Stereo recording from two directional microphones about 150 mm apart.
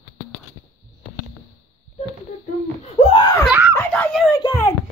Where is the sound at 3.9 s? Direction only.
5° left (ahead or behind).